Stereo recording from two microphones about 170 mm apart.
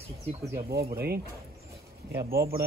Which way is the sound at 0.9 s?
65° right (ahead or behind).